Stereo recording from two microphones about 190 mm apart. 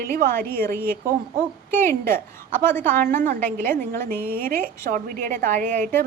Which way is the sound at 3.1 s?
40° right (ahead or behind).